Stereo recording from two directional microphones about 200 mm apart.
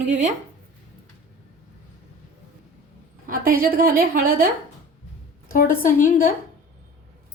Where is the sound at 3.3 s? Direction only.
45° right (ahead or behind).